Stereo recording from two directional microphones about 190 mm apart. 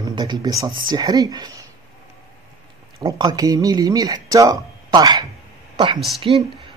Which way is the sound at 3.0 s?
20° right (ahead or behind).